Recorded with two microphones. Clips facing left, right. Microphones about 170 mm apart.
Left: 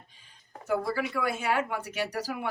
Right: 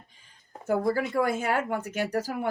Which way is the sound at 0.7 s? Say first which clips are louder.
Right 3 dB; 50° right (ahead or behind).